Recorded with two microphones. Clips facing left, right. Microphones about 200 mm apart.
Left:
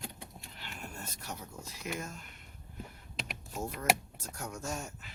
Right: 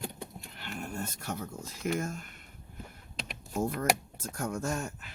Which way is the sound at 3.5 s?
55° right (ahead or behind).